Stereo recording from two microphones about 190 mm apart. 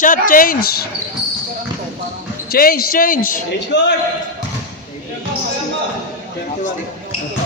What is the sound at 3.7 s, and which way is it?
Speech, 65° left (ahead or behind).